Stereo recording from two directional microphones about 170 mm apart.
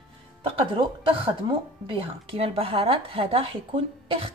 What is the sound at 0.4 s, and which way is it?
A woman's voice, 30° right (ahead or behind).